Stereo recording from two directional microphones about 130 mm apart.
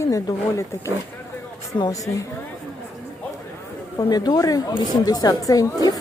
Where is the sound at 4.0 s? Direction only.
30° left (ahead or behind).